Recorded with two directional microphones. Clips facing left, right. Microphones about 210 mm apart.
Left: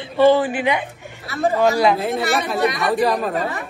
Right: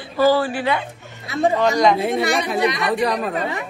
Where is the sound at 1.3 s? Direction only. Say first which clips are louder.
Right 2 dB; 15° right (ahead or behind).